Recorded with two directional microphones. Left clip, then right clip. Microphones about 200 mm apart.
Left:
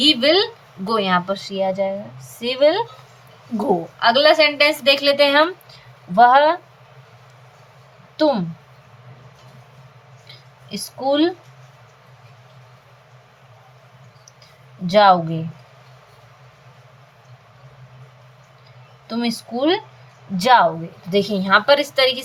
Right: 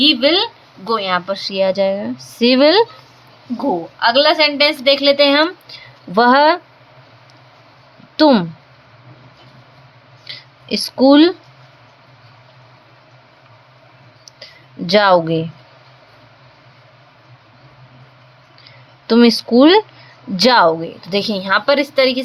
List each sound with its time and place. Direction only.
0.0 s a woman's voice: 10° right (ahead or behind)
1.3 s a woman's voice: 30° right (ahead or behind)
4.0 s a woman's voice: 10° right (ahead or behind)
6.1 s speech: 45° right (ahead or behind)
8.1 s speech: 50° right (ahead or behind)
10.2 s a sound: 45° right (ahead or behind)
14.8 s speech: 45° right (ahead or behind)
19.0 s speech: 45° right (ahead or behind)
21.1 s a woman's voice: 35° right (ahead or behind)